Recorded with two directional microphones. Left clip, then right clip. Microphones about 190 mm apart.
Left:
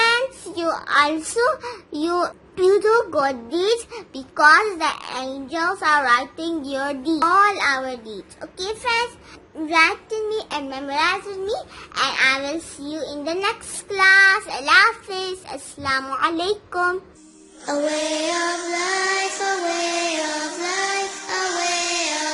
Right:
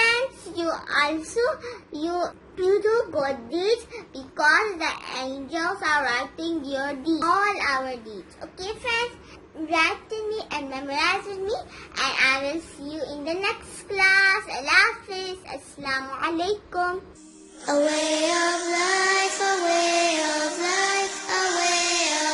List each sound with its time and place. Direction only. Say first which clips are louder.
0.0 s a child's voice: left 3 dB; 50° left (ahead or behind)
17.7 s child singing: even; centre (ahead or behind)